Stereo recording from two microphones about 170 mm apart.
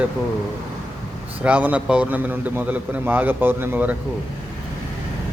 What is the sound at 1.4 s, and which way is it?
Speech, 10° right (ahead or behind).